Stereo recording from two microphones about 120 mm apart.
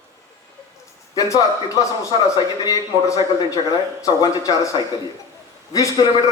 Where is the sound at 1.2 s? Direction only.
30° left (ahead or behind).